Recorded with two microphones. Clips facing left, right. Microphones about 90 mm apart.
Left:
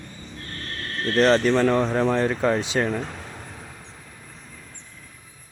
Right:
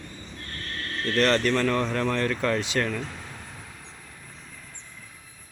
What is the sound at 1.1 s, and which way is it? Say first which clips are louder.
Speech: left 4 dB; 20° left (ahead or behind).